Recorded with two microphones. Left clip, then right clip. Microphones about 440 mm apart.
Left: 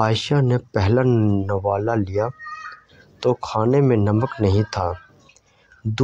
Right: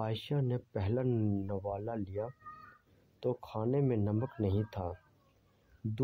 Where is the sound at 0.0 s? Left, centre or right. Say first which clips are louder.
Left 17 dB; right.